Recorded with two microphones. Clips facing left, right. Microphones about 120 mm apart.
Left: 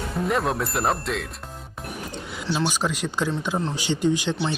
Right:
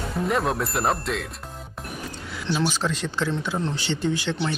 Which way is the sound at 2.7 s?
15° left (ahead or behind).